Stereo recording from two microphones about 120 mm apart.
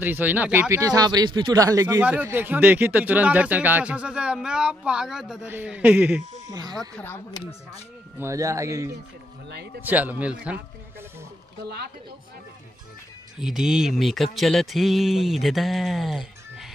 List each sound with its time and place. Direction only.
0.0 s speech: 15° right (ahead or behind)
0.7 s speech: 30° right (ahead or behind)
2.0 s speech: 15° right (ahead or behind)
6.4 s speech: 35° right (ahead or behind)
6.7 s speech: 5° left (ahead or behind)
8.2 s speech: 25° right (ahead or behind)
9.8 s speech: 15° right (ahead or behind)
13.4 s speech: 5° right (ahead or behind)